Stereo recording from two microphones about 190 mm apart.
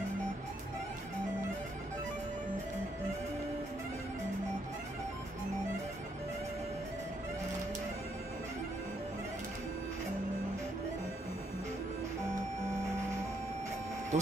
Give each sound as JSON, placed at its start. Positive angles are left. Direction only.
{"t": 14.1, "sound": "speech", "side_deg": -35}